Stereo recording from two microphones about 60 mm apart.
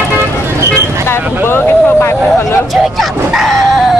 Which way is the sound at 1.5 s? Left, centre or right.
Left.